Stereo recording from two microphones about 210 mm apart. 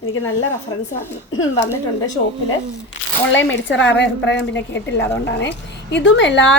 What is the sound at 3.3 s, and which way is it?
A woman's voice, 65° left (ahead or behind).